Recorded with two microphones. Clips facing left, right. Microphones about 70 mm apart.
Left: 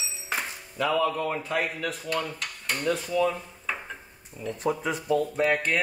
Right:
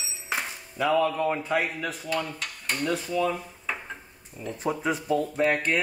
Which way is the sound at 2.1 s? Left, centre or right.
Centre.